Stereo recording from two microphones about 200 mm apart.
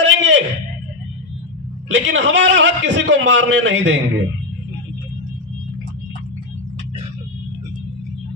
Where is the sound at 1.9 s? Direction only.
60° right (ahead or behind).